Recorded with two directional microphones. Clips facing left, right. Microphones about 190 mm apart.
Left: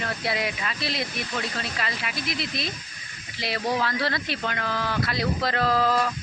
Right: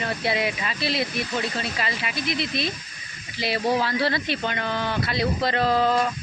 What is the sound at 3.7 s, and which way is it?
Speech, 25° right (ahead or behind).